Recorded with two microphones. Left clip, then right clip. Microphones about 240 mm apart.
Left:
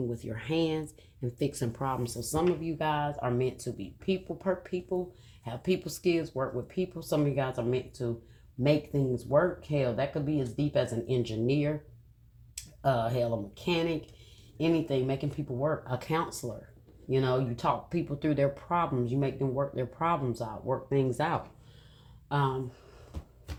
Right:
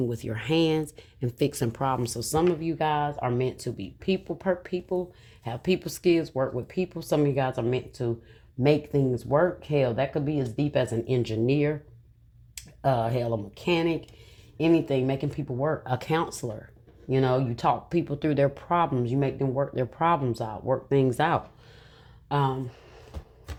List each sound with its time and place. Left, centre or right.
0.1 s speech: right
12.8 s speech: right